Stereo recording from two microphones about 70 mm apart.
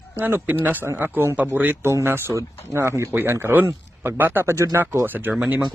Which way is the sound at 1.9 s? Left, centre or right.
Right.